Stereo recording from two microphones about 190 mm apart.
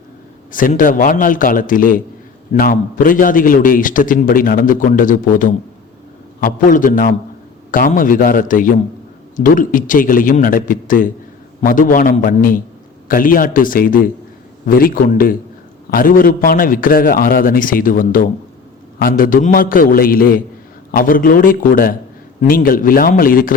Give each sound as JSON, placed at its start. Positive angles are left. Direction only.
{"t": 0.5, "sound": "a man's voice", "side_deg": 45}